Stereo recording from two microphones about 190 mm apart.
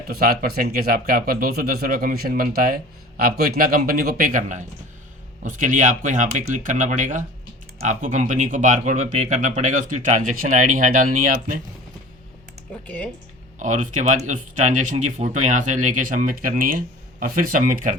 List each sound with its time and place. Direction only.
0.1 s speech: 55° right (ahead or behind)
13.6 s speech: 40° right (ahead or behind)